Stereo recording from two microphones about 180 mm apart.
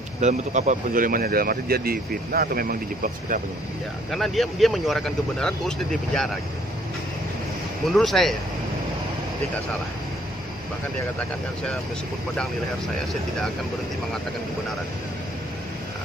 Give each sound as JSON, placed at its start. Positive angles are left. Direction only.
{"t": 0.2, "sound": "speech", "side_deg": -40}
{"t": 4.1, "sound": "speech", "side_deg": 0}
{"t": 7.8, "sound": "speech", "side_deg": 0}